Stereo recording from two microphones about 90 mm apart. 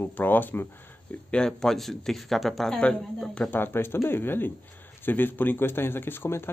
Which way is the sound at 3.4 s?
25° left (ahead or behind).